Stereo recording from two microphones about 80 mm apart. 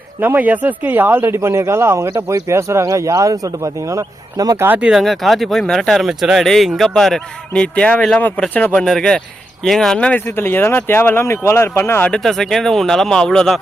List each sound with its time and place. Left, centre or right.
0.2 s speech: right
4.5 s speech: right
4.8 s speech: centre
8.8 s speech: centre
10.2 s speech: left
12.1 s speech: centre